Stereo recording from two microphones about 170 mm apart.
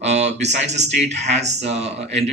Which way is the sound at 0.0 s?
40° right (ahead or behind).